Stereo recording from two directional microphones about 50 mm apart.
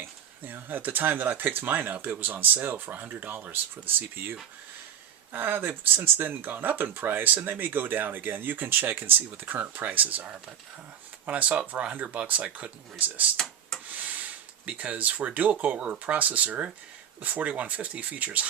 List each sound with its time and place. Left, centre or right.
0.0 s speech: right
13.9 s a sound: right
14.7 s speech: right